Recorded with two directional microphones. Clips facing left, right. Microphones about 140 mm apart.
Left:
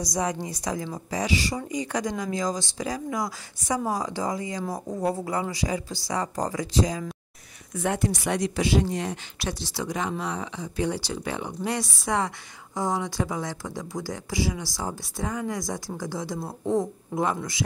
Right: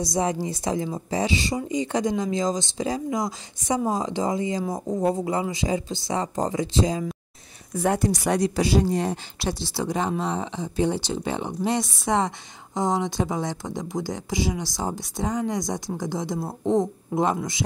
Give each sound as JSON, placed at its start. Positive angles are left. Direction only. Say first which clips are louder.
{"t": 0.0, "sound": "speech", "louder": "right 3 dB", "side_deg": -25}
{"t": 7.7, "sound": "speech", "louder": "right 4 dB", "side_deg": -40}